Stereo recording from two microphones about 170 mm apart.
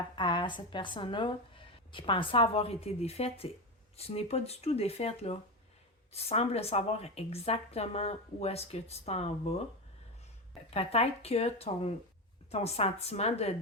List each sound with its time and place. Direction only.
0.2 s speech: 25° left (ahead or behind)
10.8 s speech: 35° left (ahead or behind)